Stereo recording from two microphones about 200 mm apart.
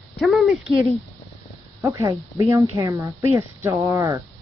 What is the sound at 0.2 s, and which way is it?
Speech, centre (ahead or behind).